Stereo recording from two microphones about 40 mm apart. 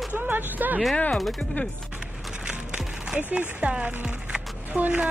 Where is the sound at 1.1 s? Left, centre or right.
Centre.